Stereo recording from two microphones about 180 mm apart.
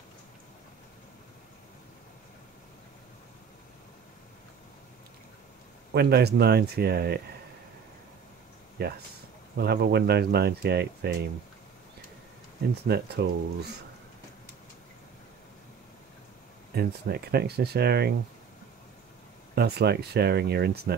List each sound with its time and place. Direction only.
5.9 s speech: 65° right (ahead or behind)
8.8 s speech: 60° right (ahead or behind)
12.8 s speech: 65° right (ahead or behind)
16.7 s speech: 60° right (ahead or behind)
19.5 s speech: 65° right (ahead or behind)